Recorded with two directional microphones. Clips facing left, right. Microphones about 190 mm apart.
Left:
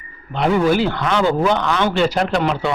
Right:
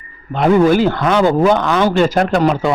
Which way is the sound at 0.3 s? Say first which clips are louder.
Right 5 dB; 45° right (ahead or behind).